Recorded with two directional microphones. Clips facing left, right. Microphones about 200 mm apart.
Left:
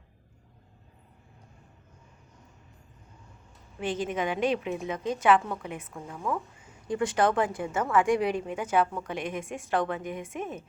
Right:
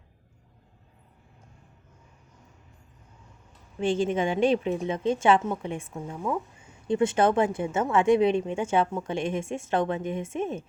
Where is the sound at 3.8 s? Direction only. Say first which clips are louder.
Right 5 dB; 30° right (ahead or behind).